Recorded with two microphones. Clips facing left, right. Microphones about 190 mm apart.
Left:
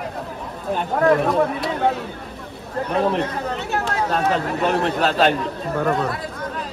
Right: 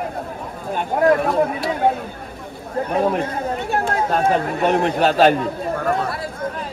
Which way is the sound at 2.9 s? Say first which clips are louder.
Right 1 dB; 10° right (ahead or behind).